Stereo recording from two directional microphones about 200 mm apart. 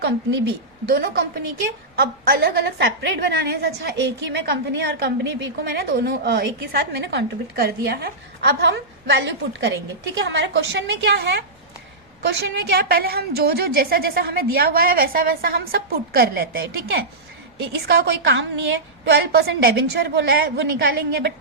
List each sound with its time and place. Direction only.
0.9 s a woman's voice: 50° right (ahead or behind)